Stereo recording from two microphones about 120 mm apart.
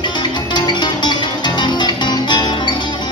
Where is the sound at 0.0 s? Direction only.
35° left (ahead or behind).